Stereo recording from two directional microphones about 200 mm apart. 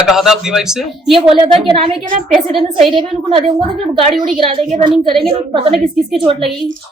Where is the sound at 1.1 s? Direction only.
25° right (ahead or behind).